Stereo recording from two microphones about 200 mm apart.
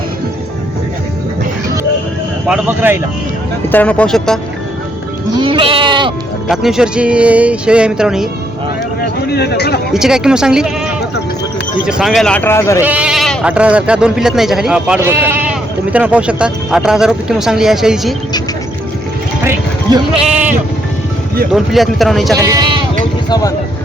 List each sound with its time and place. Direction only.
2.5 s speech: 10° right (ahead or behind)
3.7 s speech: 5° left (ahead or behind)
5.3 s bleat: 25° right (ahead or behind)
6.5 s speech: centre (ahead or behind)
9.2 s speech: 55° left (ahead or behind)
9.9 s speech: 5° right (ahead or behind)
11.9 s speech: centre (ahead or behind); by 12.8 s 15° left (ahead or behind)
12.8 s speech: 5° right (ahead or behind)
19.9 s speech: 20° right (ahead or behind)
20.2 s sheep: 35° right (ahead or behind)
21.5 s speech: centre (ahead or behind)
22.4 s speech: 15° right (ahead or behind)
23.3 s speech: 15° left (ahead or behind)